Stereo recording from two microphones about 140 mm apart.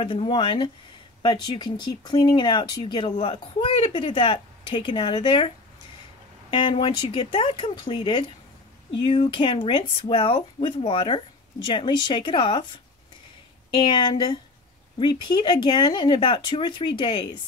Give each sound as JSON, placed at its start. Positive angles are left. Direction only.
{"t": 0.0, "sound": "speech", "side_deg": 35}
{"t": 6.5, "sound": "speech", "side_deg": 40}
{"t": 13.7, "sound": "speech", "side_deg": 35}